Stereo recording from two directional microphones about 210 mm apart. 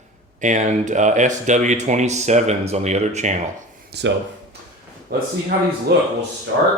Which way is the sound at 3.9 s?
50° right (ahead or behind).